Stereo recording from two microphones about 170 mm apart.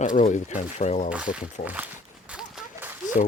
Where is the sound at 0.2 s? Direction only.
45° left (ahead or behind).